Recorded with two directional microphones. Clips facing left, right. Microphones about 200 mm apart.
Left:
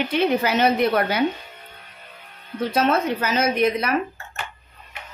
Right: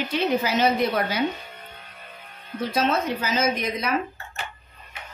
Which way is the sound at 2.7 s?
60° left (ahead or behind).